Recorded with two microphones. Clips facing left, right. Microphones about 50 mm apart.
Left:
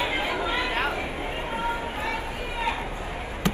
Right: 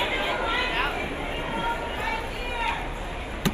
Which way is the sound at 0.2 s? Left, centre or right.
Right.